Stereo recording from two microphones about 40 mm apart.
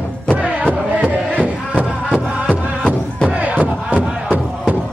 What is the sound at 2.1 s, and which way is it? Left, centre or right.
Music, left.